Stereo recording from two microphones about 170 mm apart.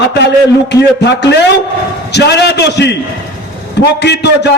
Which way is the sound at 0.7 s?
90° left.